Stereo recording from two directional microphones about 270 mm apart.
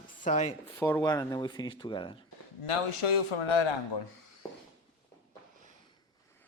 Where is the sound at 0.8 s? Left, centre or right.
Centre.